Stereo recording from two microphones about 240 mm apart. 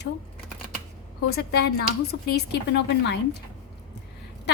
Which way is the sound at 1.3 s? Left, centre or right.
Left.